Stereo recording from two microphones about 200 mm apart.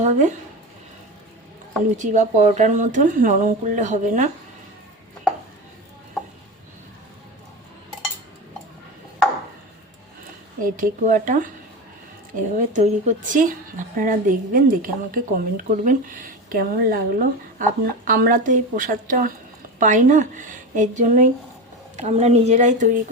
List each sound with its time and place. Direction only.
0.0 s speech: 35° right (ahead or behind)
2.0 s speech: 40° right (ahead or behind)
10.8 s a woman's voice: 40° right (ahead or behind)